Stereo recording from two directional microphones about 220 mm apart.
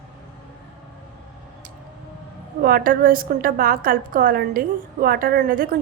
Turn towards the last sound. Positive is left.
turn(degrees=-40)  # may be behind; listen again after turning